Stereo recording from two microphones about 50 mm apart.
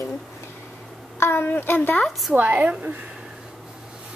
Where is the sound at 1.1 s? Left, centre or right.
Left.